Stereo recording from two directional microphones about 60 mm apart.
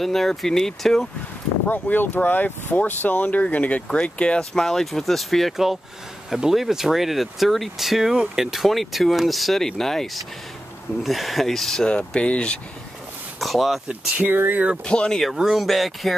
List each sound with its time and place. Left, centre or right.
0.0 s speech: centre
1.7 s speech: left
13.4 s speech: centre
14.2 s speech: right
14.9 s speech: centre
15.3 s speech: centre